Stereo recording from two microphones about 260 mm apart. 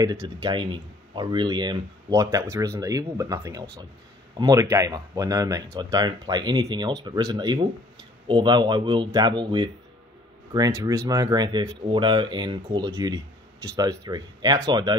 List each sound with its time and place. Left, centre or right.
0.0 s speech: centre